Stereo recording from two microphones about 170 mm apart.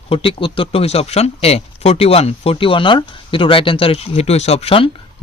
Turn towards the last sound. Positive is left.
turn(degrees=35)  # may be behind; listen again after turning